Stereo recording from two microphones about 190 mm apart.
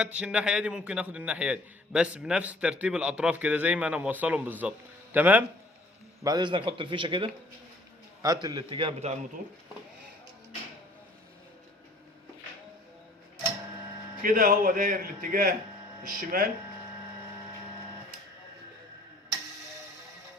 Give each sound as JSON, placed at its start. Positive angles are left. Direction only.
{"t": 0.0, "sound": "a man's voice", "side_deg": -5}
{"t": 6.2, "sound": "a man's voice", "side_deg": -25}
{"t": 14.2, "sound": "speech", "side_deg": -50}